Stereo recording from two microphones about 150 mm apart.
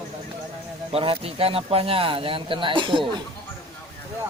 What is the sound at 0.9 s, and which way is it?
Speech, 40° right (ahead or behind).